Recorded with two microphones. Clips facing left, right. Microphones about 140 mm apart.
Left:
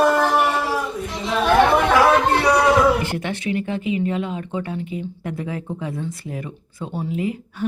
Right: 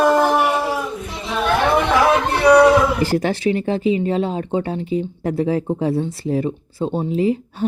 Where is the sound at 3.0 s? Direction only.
35° right (ahead or behind).